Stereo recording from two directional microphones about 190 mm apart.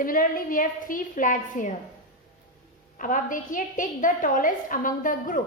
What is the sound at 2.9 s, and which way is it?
A woman's voice, 45° left (ahead or behind).